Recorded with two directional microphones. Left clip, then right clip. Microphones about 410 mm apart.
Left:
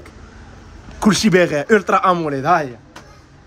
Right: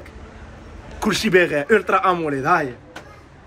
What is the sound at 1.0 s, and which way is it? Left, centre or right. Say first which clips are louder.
Speech: left 2 dB; left.